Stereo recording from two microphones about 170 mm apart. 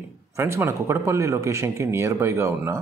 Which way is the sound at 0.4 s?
15° right (ahead or behind).